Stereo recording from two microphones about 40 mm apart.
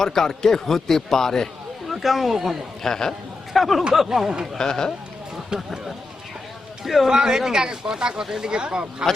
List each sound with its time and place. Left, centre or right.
0.0 s a man's voice: centre
1.9 s speech: centre
2.8 s a man's voice: centre
3.5 s speech: centre
4.5 s a man's voice: centre
6.8 s speech: centre
7.1 s speech: centre